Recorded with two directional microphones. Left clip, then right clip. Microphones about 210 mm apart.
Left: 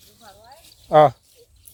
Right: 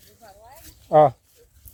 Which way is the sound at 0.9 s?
10° left (ahead or behind).